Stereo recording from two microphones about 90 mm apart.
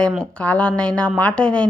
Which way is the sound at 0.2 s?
15° left (ahead or behind).